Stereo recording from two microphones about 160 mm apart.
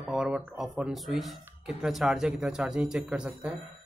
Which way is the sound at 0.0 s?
5° right (ahead or behind).